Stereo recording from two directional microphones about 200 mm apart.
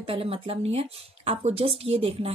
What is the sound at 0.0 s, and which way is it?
Speech, 30° right (ahead or behind).